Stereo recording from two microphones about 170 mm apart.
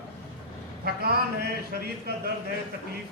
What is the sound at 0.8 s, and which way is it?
Speech, 70° right (ahead or behind).